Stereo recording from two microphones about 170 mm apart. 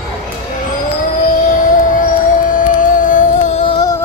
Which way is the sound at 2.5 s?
50° left (ahead or behind).